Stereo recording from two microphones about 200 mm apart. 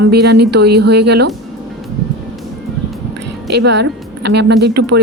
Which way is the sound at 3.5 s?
55° right (ahead or behind).